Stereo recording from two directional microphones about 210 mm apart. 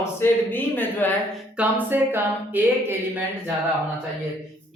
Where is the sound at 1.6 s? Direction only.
10° right (ahead or behind).